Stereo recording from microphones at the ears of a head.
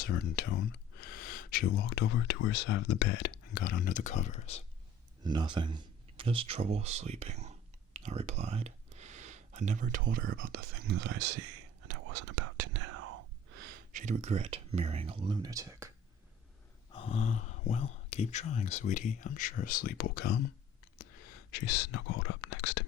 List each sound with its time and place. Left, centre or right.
0.0 s speech: left
6.1 s speech: right
7.9 s whispering: right
16.9 s speech: left